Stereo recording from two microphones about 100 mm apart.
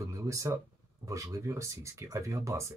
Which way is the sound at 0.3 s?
30° right (ahead or behind).